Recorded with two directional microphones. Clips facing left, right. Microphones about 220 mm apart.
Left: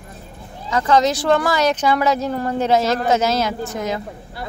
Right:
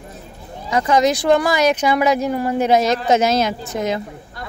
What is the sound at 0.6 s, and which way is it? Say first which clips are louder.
Speech: right 1 dB; 15° right (ahead or behind).